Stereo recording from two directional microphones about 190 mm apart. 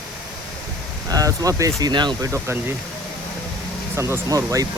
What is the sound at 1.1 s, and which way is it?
Speech, 20° right (ahead or behind).